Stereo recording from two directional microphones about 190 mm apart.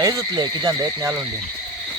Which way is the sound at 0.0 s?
20° right (ahead or behind).